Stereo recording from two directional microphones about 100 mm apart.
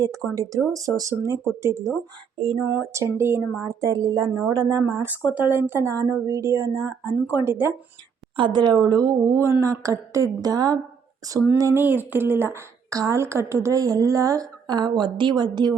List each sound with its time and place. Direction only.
0.3 s a woman's voice: 35° right (ahead or behind)
5.3 s a woman's voice: 20° right (ahead or behind)
5.9 s a woman's voice: 35° right (ahead or behind)
8.4 s a woman's voice: 50° right (ahead or behind); by 11.8 s 35° right (ahead or behind)
11.8 s a woman's voice: 20° right (ahead or behind); by 15.7 s 45° right (ahead or behind)